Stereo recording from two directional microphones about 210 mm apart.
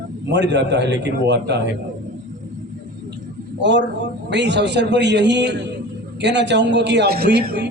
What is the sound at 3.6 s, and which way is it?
A man's voice, 55° right (ahead or behind).